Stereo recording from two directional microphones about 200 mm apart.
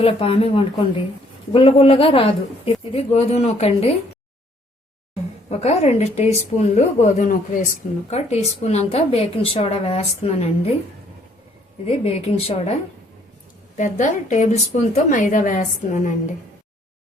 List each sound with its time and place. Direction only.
0.0 s a woman's voice: 30° left (ahead or behind)
5.5 s a woman's voice: 30° left (ahead or behind)
11.9 s a woman's voice: 30° left (ahead or behind)